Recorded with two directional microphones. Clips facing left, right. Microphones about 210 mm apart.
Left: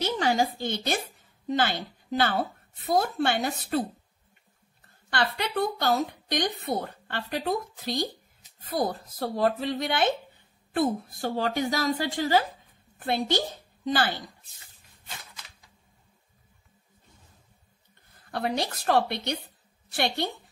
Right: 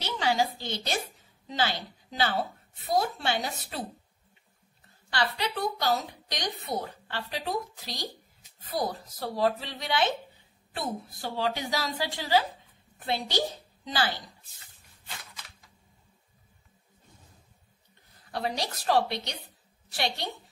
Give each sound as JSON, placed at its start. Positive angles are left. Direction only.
{"t": 0.0, "sound": "a woman's voice", "side_deg": 50}
{"t": 5.1, "sound": "a woman's voice", "side_deg": 50}
{"t": 18.3, "sound": "a woman's voice", "side_deg": 55}